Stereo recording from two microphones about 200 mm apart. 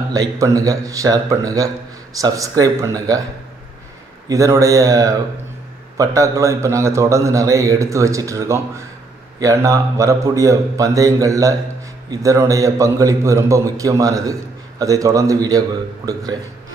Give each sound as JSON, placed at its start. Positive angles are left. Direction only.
{"t": 0.1, "sound": "a man's voice", "side_deg": -15}
{"t": 4.3, "sound": "a man's voice", "side_deg": -15}